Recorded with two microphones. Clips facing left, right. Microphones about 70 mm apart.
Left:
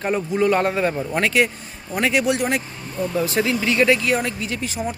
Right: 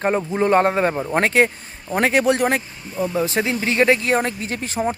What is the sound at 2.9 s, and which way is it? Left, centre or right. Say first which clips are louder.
Speech: right 1 dB; centre.